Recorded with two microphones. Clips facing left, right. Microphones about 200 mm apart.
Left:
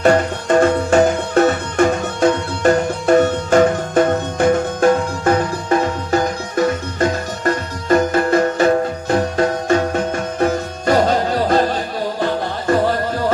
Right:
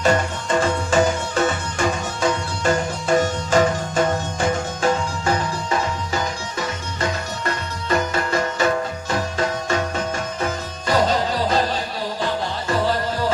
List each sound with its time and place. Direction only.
0.0 s music: 60° left (ahead or behind)